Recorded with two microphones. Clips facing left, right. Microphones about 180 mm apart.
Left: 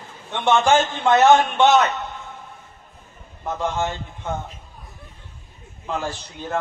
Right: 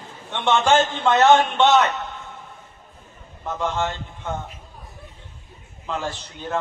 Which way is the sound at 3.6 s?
10° left (ahead or behind).